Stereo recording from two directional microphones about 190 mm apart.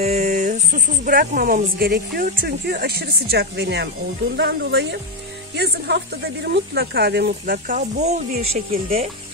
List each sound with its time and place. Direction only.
0.0 s speech: 35° right (ahead or behind)